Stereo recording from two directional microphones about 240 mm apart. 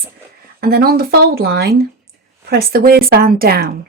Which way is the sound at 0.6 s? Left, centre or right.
Right.